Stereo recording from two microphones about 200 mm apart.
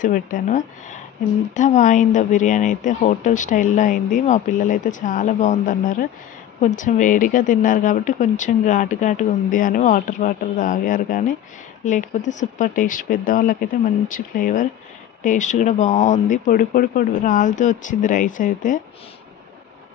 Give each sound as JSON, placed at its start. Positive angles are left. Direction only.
{"t": 0.0, "sound": "speech", "side_deg": 45}